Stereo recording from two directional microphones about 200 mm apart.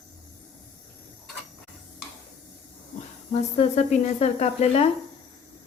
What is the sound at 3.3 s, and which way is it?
Speech, 35° left (ahead or behind).